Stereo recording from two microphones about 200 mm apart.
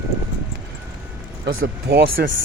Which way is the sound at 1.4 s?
90° right.